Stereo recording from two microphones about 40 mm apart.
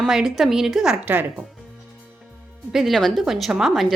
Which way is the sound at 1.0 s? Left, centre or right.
Right.